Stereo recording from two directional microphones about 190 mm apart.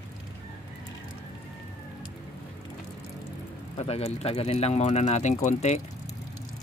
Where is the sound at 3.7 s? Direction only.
30° left (ahead or behind).